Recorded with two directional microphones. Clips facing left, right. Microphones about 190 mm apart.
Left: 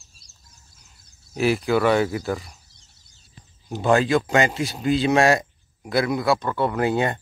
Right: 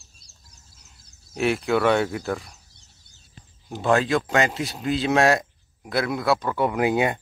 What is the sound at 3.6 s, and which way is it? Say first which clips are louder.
Speech: left 2 dB; centre (ahead or behind).